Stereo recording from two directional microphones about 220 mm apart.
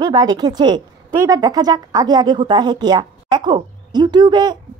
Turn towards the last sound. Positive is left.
turn(degrees=-20)  # may be behind; listen again after turning